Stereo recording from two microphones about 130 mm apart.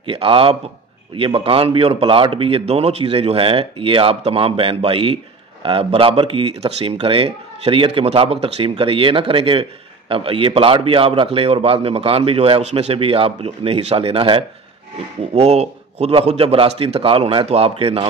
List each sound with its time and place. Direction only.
0.0 s speech: 45° right (ahead or behind)
15.3 s speech: 55° right (ahead or behind)